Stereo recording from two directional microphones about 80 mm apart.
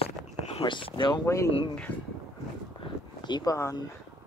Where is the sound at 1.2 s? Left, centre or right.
Left.